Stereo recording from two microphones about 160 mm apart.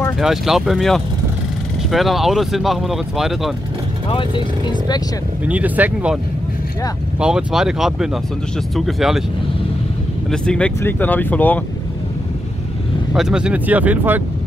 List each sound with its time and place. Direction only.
0.2 s speech: centre (ahead or behind)
4.1 s speech: 30° left (ahead or behind)
5.4 s speech: 10° right (ahead or behind)
7.2 s speech: 5° right (ahead or behind)
10.3 s speech: 5° left (ahead or behind)
13.1 s speech: 5° right (ahead or behind)